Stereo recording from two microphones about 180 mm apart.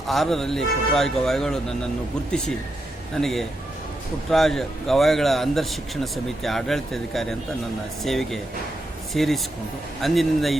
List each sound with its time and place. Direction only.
0.1 s speech: centre (ahead or behind)
3.2 s speech: centre (ahead or behind)